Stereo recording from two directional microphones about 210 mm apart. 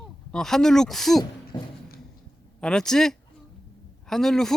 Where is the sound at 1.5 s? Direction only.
20° left (ahead or behind).